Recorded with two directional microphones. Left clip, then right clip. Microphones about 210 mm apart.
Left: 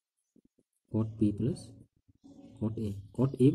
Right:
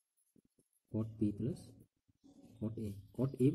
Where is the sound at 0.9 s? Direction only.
10° left (ahead or behind).